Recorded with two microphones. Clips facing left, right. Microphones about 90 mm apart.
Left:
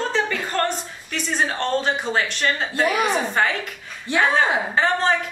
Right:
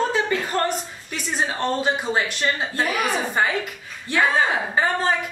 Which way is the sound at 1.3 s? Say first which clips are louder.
Left 1 dB; 5° right (ahead or behind).